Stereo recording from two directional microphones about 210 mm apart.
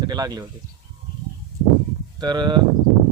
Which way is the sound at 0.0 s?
20° right (ahead or behind).